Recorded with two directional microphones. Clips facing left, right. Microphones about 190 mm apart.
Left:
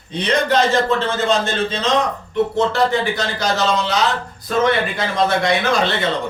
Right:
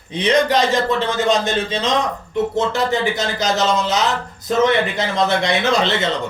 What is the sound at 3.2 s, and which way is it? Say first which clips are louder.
A man's voice: right 1 dB; 20° right (ahead or behind).